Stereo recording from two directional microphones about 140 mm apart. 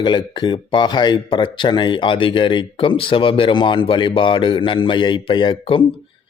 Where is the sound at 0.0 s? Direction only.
35° left (ahead or behind).